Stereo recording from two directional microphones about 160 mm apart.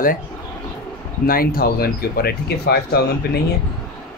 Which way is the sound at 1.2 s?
65° left (ahead or behind).